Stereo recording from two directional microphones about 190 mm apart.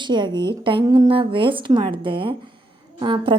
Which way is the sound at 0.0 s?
25° right (ahead or behind).